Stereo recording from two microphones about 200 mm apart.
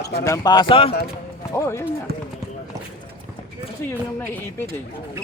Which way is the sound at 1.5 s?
15° left (ahead or behind).